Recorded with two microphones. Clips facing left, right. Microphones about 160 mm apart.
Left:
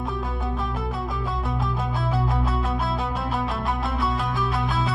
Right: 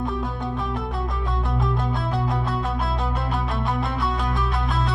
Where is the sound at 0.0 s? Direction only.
Centre (ahead or behind).